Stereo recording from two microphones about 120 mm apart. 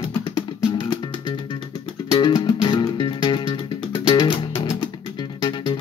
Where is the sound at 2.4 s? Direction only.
40° left (ahead or behind).